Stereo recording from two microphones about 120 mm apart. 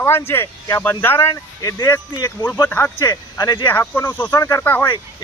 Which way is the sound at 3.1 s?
35° left (ahead or behind).